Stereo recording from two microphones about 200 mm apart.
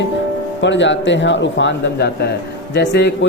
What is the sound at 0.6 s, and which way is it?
A man's voice, 65° left (ahead or behind).